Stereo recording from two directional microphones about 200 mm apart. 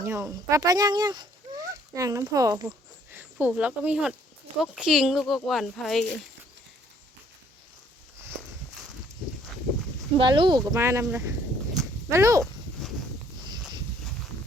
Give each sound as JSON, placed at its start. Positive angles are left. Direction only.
{"t": 0.0, "sound": "speech", "side_deg": -15}
{"t": 10.2, "sound": "speech", "side_deg": -25}
{"t": 12.8, "sound": "a sound", "side_deg": 0}